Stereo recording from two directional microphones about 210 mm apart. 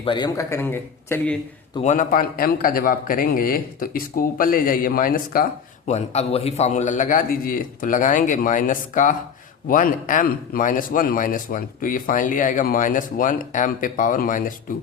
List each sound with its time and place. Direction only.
0.0 s a man's voice: 20° left (ahead or behind)
1.8 s a man's voice: 35° left (ahead or behind)
5.9 s speech: 30° left (ahead or behind)